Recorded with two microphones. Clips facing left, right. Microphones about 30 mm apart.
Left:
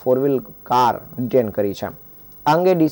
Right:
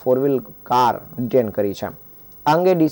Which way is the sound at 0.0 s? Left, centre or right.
Centre.